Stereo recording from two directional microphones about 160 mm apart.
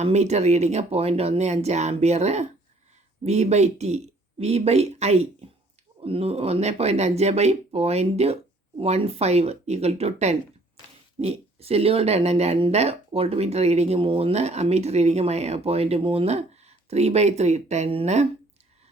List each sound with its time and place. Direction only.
0.0 s speech: 45° right (ahead or behind)